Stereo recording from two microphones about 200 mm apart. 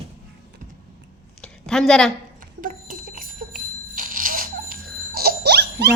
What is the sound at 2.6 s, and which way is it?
Bicycle bell, 45° right (ahead or behind).